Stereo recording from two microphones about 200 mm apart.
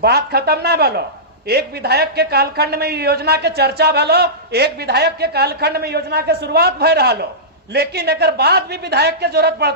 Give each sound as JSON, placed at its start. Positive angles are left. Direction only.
{"t": 0.0, "sound": "a woman's voice", "side_deg": -50}